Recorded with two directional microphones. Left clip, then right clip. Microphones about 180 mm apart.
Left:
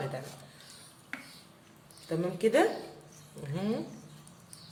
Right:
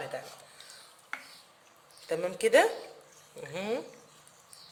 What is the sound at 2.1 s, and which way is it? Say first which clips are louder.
Speech: right 3 dB; 45° right (ahead or behind).